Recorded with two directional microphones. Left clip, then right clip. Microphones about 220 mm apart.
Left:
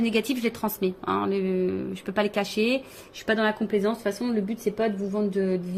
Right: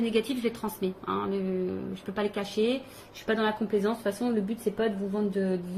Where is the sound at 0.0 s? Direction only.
45° left (ahead or behind).